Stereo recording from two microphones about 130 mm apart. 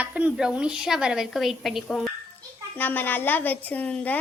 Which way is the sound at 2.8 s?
15° left (ahead or behind).